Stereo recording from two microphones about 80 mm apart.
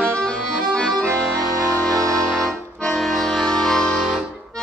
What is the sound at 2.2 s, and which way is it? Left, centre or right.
Accordion, centre.